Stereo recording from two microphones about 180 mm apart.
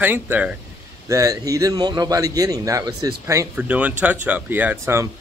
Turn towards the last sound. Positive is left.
turn(degrees=-10)  # may be behind; listen again after turning